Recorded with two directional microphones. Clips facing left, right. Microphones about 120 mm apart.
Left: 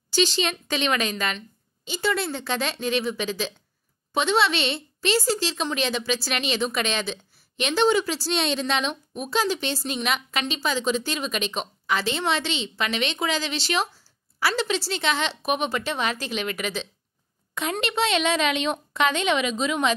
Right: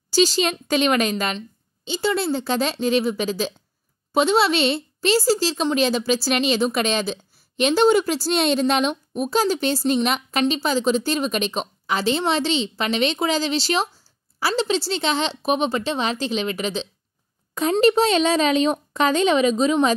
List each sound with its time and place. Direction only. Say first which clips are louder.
0.1 s a woman's voice: right 5 dB; 40° right (ahead or behind)